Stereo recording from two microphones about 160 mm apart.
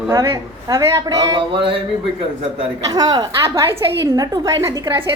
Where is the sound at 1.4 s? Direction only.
35° right (ahead or behind).